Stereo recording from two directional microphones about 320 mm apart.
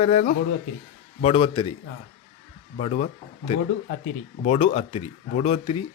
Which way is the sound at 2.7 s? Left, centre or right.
Centre.